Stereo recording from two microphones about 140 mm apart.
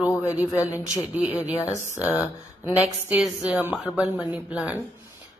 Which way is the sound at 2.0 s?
5° right (ahead or behind).